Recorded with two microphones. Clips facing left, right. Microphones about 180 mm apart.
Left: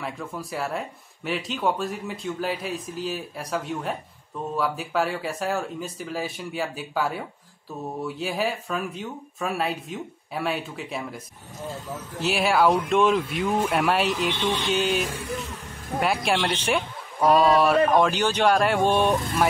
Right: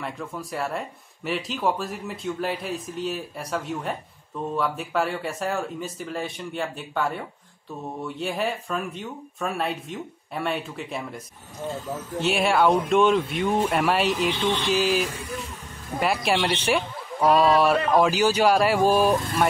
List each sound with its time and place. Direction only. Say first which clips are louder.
0.0 s speech: even; centre (ahead or behind)